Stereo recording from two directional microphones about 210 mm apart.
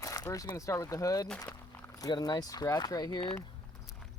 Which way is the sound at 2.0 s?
20° left (ahead or behind).